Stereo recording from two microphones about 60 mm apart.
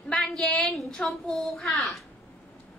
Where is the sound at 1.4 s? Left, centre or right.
Centre.